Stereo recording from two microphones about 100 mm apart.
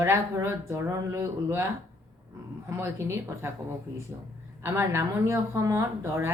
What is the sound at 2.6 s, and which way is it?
Speech, 25° right (ahead or behind).